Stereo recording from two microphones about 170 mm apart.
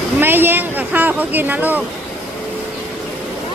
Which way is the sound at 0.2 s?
10° right (ahead or behind).